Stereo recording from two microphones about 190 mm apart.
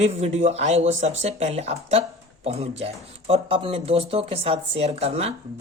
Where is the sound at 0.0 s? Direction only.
35° right (ahead or behind).